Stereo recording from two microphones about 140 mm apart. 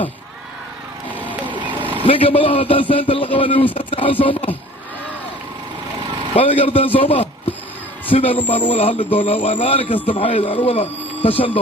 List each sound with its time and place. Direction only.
2.0 s a man's voice: 40° left (ahead or behind)
6.3 s a man's voice: 40° left (ahead or behind)